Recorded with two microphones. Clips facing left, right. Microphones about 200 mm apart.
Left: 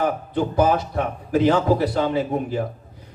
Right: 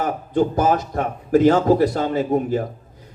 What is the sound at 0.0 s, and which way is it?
A man's voice, 45° right (ahead or behind).